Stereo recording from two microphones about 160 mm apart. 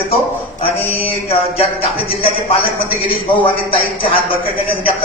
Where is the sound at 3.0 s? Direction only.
30° left (ahead or behind).